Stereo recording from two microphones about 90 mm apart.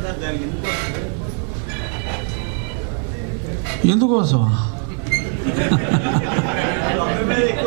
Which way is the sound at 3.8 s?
15° right (ahead or behind).